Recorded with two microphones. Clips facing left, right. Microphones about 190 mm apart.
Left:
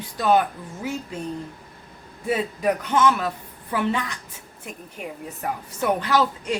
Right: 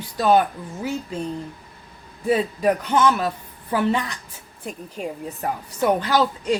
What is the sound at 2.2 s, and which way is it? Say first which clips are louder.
A woman's voice: right 3 dB; 35° right (ahead or behind).